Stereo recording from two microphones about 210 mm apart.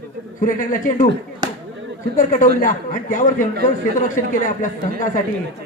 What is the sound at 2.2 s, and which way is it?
Speech, 35° left (ahead or behind).